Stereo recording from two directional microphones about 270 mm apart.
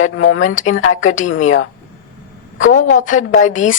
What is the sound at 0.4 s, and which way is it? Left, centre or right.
Speech, left.